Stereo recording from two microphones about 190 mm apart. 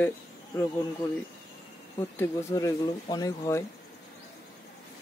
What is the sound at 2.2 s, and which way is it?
Speech, 15° left (ahead or behind).